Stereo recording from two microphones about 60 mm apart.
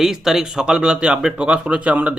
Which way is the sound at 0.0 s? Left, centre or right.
Centre.